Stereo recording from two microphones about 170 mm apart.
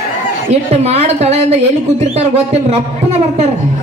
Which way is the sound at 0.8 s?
40° right (ahead or behind).